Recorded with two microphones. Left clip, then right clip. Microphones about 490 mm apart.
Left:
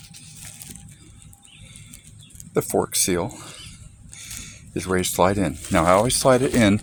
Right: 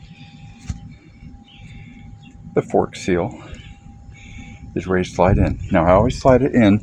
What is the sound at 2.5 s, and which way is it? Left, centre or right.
Speech, left.